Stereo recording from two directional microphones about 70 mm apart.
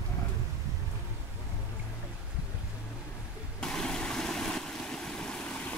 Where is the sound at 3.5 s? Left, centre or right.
Centre.